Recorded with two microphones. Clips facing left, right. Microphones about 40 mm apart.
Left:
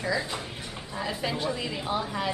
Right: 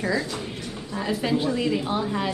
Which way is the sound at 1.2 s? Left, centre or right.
Centre.